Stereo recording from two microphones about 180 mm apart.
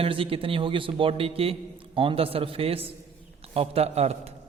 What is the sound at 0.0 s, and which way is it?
A man's voice, 30° right (ahead or behind).